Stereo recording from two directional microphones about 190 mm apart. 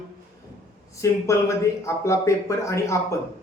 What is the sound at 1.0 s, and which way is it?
Speech, 15° left (ahead or behind).